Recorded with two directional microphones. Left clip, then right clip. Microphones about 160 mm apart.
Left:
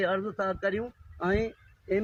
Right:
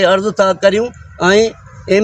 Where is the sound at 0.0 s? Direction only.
35° right (ahead or behind).